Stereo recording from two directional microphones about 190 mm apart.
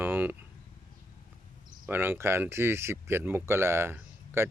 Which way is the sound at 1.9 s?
10° right (ahead or behind).